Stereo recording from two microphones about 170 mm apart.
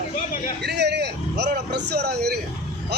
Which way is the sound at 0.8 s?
80° right.